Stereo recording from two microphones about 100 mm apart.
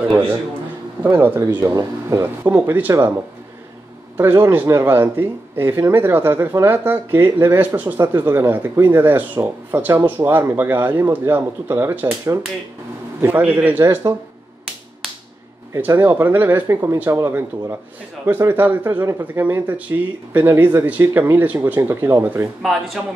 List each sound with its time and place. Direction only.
1.0 s speech: 20° right (ahead or behind)
2.9 s speech: 30° right (ahead or behind)
4.2 s speech: 25° right (ahead or behind)
13.4 s speech: 15° right (ahead or behind)
15.7 s speech: 25° right (ahead or behind)